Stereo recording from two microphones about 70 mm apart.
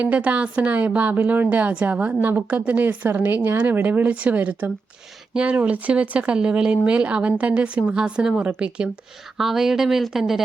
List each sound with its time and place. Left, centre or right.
0.0 s a woman's voice: centre
9.4 s speech: centre